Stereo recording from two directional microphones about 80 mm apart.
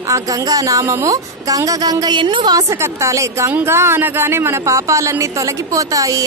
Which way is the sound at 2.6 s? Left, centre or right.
Right.